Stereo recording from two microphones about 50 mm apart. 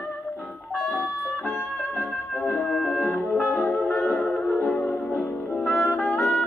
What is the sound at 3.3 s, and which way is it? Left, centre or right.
Music, centre.